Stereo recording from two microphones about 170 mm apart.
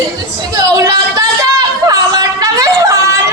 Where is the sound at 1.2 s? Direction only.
20° right (ahead or behind).